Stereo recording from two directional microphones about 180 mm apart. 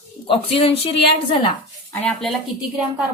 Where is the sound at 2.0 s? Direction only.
5° left (ahead or behind).